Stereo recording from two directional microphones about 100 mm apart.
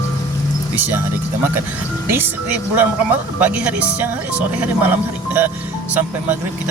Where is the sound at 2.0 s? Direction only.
20° right (ahead or behind).